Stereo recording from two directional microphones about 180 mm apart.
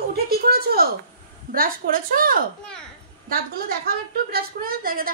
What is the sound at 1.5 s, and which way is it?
Speech, 50° right (ahead or behind).